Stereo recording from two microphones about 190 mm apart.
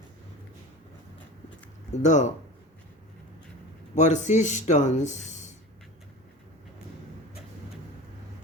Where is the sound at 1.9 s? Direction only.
40° left (ahead or behind).